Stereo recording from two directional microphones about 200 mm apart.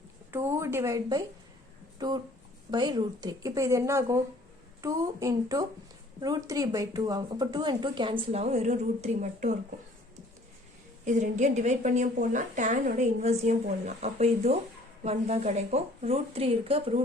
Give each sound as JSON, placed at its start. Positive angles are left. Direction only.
{"t": 0.3, "sound": "speech", "side_deg": -10}
{"t": 11.0, "sound": "a woman's voice", "side_deg": -35}